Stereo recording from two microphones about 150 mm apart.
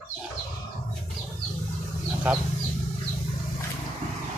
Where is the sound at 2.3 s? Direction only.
10° right (ahead or behind).